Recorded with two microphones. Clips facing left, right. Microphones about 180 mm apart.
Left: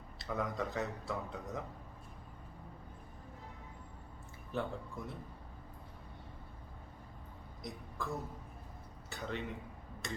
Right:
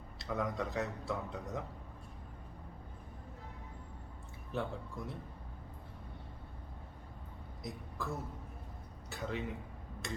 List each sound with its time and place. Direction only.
0.2 s speech: centre (ahead or behind)
4.5 s speech: centre (ahead or behind)
7.6 s a sound: centre (ahead or behind)
10.0 s tick-tock: centre (ahead or behind)